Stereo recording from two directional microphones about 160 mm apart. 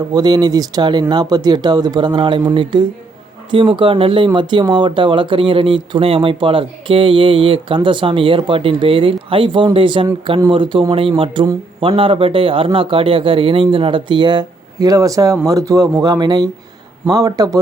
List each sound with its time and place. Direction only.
0.1 s speech: 25° right (ahead or behind)